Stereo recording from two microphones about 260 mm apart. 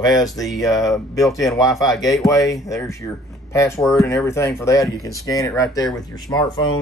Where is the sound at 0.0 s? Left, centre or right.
Centre.